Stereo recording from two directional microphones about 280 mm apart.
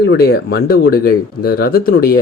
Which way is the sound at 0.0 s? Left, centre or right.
Left.